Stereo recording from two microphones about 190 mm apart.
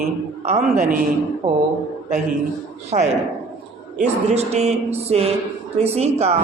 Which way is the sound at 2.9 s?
35° right (ahead or behind).